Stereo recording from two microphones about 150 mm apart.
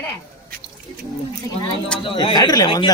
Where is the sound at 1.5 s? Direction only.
25° left (ahead or behind).